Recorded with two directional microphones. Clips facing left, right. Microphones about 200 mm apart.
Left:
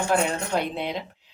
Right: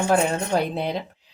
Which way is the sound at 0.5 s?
40° right (ahead or behind).